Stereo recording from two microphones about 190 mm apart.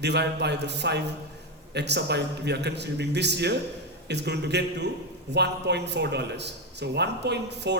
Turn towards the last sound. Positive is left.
turn(degrees=-60)  # may be behind; listen again after turning